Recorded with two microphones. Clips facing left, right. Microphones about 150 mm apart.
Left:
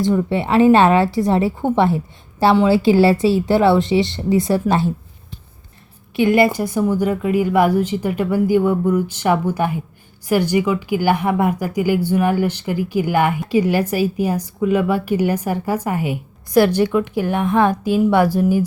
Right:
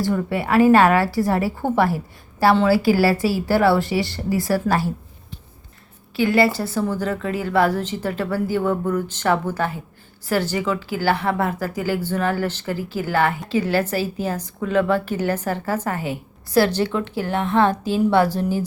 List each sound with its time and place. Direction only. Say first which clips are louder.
0.0 s a woman's voice: left 4 dB; 20° left (ahead or behind)
6.1 s a woman's voice: left 3 dB; 20° left (ahead or behind)